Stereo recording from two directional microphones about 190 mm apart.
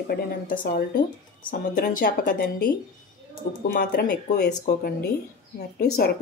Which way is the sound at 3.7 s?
50° left (ahead or behind).